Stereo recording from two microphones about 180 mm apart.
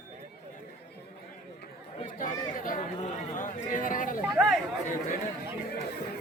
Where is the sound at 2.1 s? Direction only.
50° left (ahead or behind).